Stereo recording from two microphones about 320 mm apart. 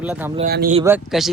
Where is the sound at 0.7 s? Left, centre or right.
Centre.